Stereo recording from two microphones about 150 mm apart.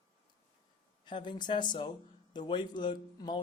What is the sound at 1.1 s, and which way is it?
Speech, 30° left (ahead or behind).